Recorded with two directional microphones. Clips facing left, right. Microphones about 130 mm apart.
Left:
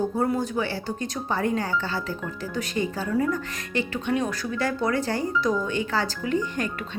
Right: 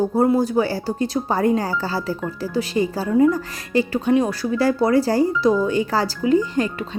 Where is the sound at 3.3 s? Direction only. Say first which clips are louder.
Right 7 dB; 35° right (ahead or behind).